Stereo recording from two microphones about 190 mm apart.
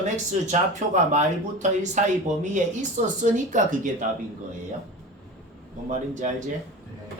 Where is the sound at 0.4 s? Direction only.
40° right (ahead or behind).